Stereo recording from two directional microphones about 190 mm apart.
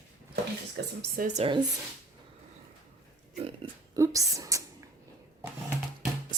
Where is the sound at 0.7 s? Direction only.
60° right (ahead or behind).